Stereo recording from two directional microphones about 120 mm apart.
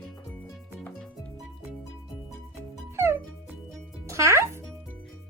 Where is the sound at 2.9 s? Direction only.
20° right (ahead or behind).